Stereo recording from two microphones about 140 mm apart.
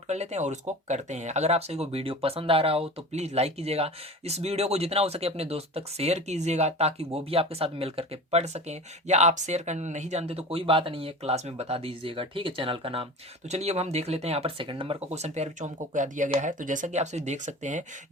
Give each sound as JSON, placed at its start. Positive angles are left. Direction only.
{"t": 0.1, "sound": "speech", "side_deg": -55}
{"t": 13.5, "sound": "speech", "side_deg": -50}